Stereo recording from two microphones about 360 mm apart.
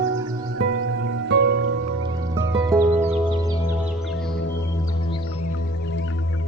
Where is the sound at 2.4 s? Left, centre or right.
Centre.